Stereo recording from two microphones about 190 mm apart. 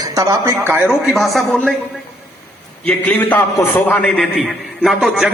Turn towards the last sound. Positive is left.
turn(degrees=0)  # may be behind; listen again after turning